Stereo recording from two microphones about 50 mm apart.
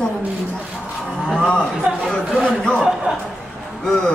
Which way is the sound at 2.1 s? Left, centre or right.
Centre.